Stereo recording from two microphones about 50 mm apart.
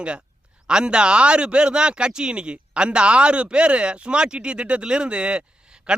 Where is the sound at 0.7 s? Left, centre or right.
Centre.